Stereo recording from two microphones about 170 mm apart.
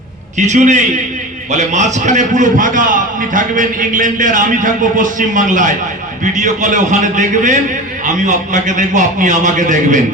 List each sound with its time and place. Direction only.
0.3 s a man's voice: 45° right (ahead or behind)